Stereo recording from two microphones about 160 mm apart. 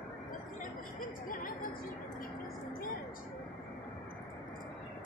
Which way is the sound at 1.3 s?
60° left (ahead or behind).